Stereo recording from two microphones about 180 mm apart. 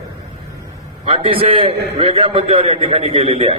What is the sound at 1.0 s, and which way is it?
A man's voice, 30° right (ahead or behind).